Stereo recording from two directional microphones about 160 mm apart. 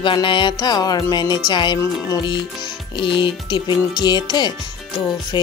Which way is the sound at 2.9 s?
30° left (ahead or behind).